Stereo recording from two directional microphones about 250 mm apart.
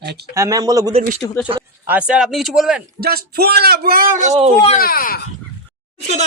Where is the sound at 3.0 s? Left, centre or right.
Right.